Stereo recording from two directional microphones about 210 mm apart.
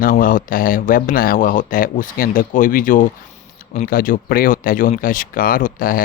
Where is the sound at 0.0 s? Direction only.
40° left (ahead or behind).